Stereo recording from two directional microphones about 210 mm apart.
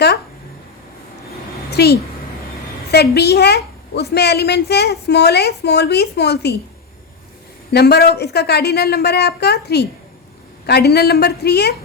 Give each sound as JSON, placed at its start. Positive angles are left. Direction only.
{"t": 1.7, "sound": "a child's voice", "side_deg": 50}
{"t": 7.7, "sound": "a woman's voice", "side_deg": 50}